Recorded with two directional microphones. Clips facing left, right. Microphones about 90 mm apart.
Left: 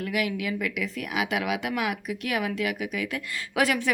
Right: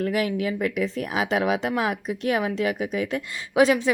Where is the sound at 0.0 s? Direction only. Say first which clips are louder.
Right 4 dB; 35° right (ahead or behind).